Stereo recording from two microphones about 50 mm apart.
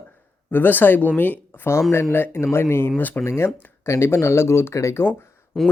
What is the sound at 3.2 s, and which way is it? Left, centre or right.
Speech, left.